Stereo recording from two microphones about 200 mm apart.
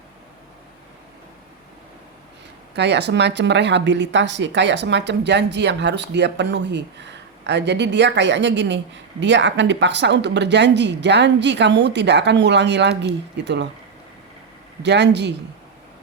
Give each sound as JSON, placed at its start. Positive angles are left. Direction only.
{"t": 2.7, "sound": "speech", "side_deg": -60}
{"t": 14.8, "sound": "speech", "side_deg": -60}